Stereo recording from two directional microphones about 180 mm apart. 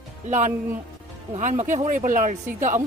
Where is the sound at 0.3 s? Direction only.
40° right (ahead or behind).